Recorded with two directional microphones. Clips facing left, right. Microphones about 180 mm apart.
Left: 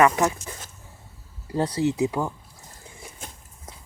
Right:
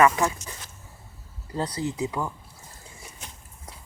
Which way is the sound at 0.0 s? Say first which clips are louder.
Left 1 dB; 35° left (ahead or behind).